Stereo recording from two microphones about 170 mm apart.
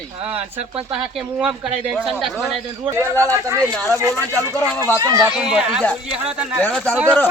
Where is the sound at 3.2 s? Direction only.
20° right (ahead or behind).